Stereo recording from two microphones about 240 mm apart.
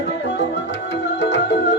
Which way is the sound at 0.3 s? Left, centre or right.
Left.